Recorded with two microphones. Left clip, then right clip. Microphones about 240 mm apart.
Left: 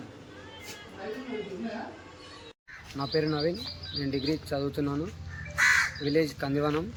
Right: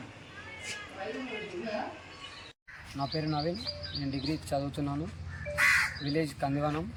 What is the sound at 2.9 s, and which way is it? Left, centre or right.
Speech, centre.